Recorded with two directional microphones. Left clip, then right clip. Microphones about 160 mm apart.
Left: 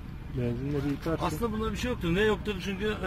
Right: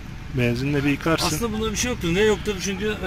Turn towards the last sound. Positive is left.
turn(degrees=-5)  # may be behind; listen again after turning